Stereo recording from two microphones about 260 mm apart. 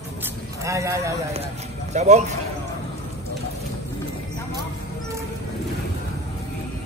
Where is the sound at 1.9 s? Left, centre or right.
Right.